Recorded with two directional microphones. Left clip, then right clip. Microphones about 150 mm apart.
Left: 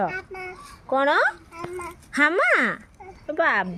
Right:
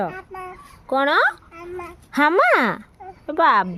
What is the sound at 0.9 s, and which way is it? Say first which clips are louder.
Speech: right 2 dB; 35° right (ahead or behind).